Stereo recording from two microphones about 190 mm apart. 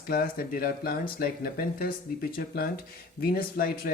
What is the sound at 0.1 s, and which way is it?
A man's voice, 50° left (ahead or behind).